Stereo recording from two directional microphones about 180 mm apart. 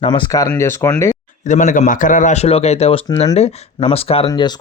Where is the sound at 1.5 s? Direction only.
45° left (ahead or behind).